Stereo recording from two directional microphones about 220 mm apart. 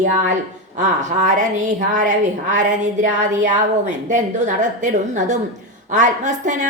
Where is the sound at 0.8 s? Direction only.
35° right (ahead or behind).